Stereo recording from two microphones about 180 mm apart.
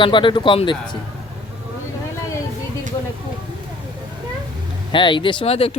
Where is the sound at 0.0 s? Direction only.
25° left (ahead or behind).